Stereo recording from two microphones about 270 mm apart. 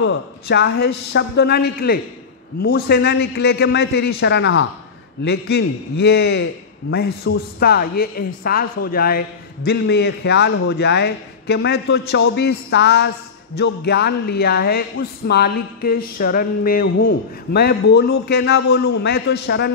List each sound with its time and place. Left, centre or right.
0.0 s a man's voice: left